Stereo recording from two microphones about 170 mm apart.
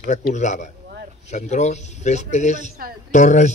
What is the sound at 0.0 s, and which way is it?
A man's voice, 45° left (ahead or behind).